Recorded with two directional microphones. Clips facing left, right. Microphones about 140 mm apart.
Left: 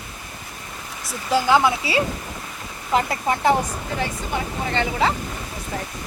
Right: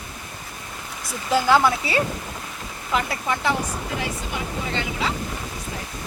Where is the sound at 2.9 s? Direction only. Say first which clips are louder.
Left 3 dB; 40° left (ahead or behind).